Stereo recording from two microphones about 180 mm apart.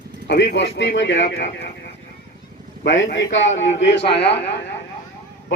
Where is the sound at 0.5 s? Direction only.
70° left (ahead or behind).